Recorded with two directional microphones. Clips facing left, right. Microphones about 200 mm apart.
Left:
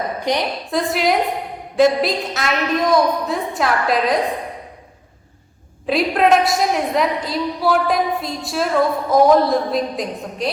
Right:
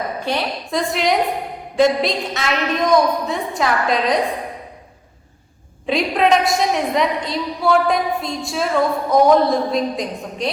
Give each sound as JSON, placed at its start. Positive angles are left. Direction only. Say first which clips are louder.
{"t": 0.3, "sound": "a woman's voice", "louder": "left 3 dB", "side_deg": 15}
{"t": 0.7, "sound": "a woman's voice", "louder": "left 1 dB", "side_deg": 5}
{"t": 5.8, "sound": "a woman's voice", "louder": "left 1 dB", "side_deg": 5}